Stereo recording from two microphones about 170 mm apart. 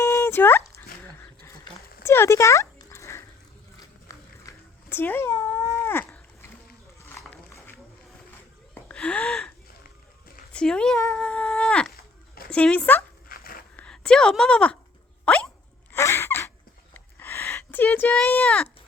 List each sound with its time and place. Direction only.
0.0 s dog: 15° left (ahead or behind)
2.0 s dog: 15° left (ahead or behind)
3.8 s a sound: 20° left (ahead or behind)
8.7 s gasp: 5° left (ahead or behind)
10.5 s speech: 5° left (ahead or behind)
11.1 s humming: 5° left (ahead or behind)
11.9 s a sound: 65° left (ahead or behind)
12.5 s speech: 5° left (ahead or behind)
13.2 s a sound: 60° left (ahead or behind)
13.7 s speech: 5° left (ahead or behind)
15.2 s rodents: 5° left (ahead or behind)
15.9 s a sound: 15° left (ahead or behind)